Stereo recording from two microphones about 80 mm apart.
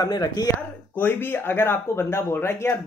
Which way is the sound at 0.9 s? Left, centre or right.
Left.